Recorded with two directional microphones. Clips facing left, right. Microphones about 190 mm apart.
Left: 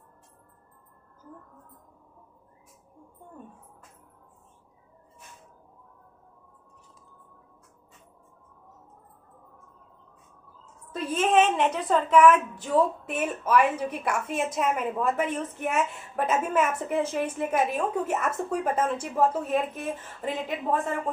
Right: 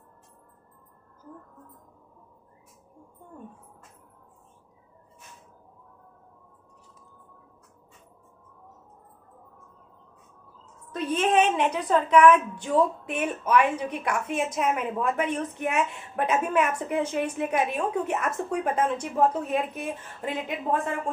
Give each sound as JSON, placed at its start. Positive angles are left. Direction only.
{"t": 10.9, "sound": "a woman's voice", "side_deg": 0}